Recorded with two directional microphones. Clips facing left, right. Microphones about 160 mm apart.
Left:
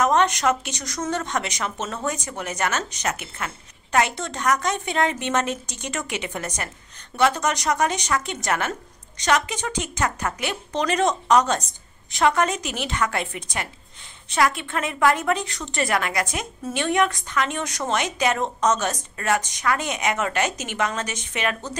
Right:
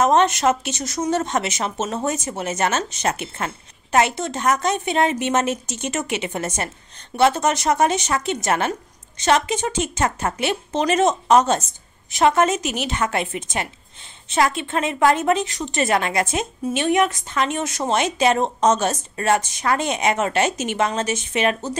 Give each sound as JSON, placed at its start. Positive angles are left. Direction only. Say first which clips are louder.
{"t": 0.0, "sound": "a woman's voice", "louder": "right 3 dB", "side_deg": -25}